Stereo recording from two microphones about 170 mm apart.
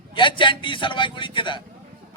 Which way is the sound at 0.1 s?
30° left (ahead or behind).